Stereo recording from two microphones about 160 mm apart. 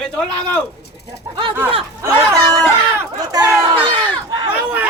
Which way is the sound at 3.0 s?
25° right (ahead or behind).